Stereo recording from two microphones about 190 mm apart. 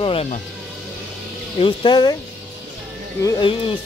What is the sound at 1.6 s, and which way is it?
Speech, 25° left (ahead or behind).